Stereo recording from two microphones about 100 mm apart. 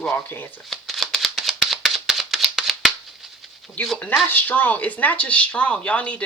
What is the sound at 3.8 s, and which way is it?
Speech, 10° left (ahead or behind).